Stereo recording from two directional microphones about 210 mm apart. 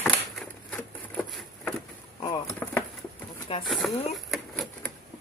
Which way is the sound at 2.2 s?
15° left (ahead or behind).